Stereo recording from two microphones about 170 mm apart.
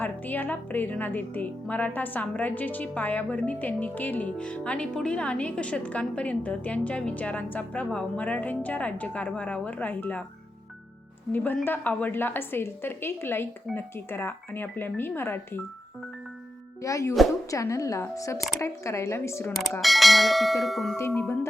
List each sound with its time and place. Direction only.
0.0 s speech: 10° left (ahead or behind)
11.3 s speech: 10° left (ahead or behind)
16.8 s speech: 20° left (ahead or behind)
19.8 s bell: centre (ahead or behind)